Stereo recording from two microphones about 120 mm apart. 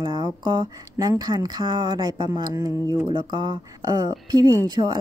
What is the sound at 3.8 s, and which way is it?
A woman's voice, 25° right (ahead or behind).